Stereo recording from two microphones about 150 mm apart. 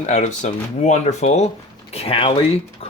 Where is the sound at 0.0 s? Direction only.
50° left (ahead or behind).